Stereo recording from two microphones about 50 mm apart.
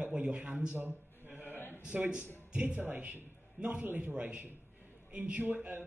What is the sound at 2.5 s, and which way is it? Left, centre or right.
A man's voice, right.